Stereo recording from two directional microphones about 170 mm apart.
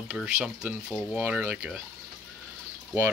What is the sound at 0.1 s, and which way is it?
Speech, 5° right (ahead or behind).